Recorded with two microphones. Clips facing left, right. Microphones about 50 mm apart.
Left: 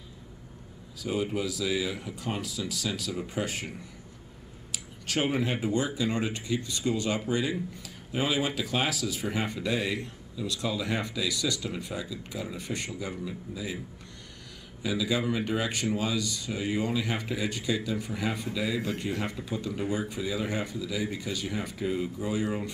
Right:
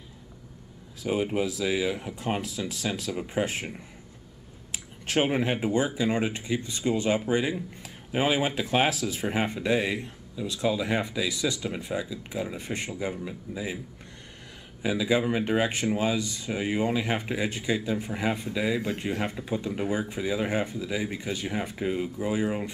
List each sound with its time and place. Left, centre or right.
1.0 s speech: right
4.7 s speech: right
14.8 s speech: right